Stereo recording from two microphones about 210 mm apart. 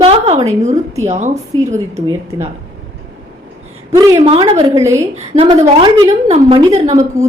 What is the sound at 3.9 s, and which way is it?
Speech, 15° right (ahead or behind).